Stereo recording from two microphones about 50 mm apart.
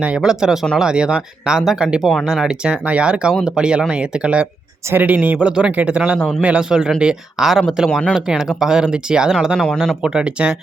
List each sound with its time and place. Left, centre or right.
0.2 s speech: centre
2.0 s speech: centre
2.2 s speech: centre
2.8 s speech: right
4.9 s speech: right
5.4 s speech: right; by 10.1 s centre